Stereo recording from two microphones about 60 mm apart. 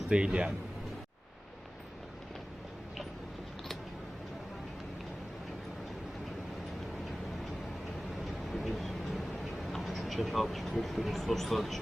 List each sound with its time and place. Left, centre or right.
0.1 s speech: centre
8.4 s vehicle: centre
9.7 s speech: centre